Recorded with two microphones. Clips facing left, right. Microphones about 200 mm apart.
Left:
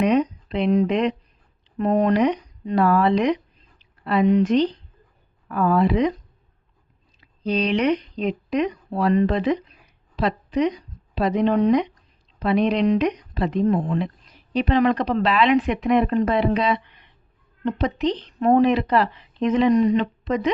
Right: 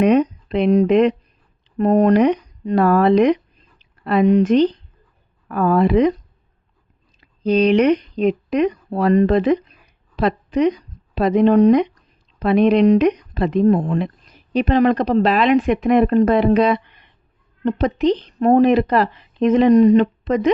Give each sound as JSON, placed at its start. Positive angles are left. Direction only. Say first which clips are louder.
{"t": 0.0, "sound": "speech", "louder": "right 5 dB", "side_deg": -50}
{"t": 7.2, "sound": "speech", "louder": "right 7 dB", "side_deg": -45}
{"t": 20.2, "sound": "speech", "louder": "right 5 dB", "side_deg": -50}